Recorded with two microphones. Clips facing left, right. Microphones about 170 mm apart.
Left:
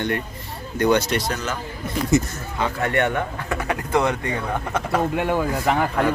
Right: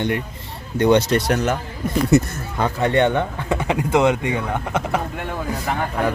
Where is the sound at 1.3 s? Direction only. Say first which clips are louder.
Right 7 dB; 65° right (ahead or behind).